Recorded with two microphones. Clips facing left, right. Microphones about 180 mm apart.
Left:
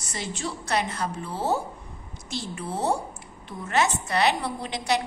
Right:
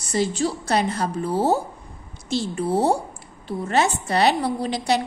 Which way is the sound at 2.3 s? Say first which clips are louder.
Right 10 dB; 30° right (ahead or behind).